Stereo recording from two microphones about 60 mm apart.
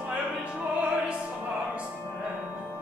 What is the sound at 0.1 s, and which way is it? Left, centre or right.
Opera, right.